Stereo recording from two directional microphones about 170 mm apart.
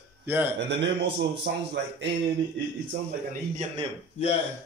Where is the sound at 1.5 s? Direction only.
85° right.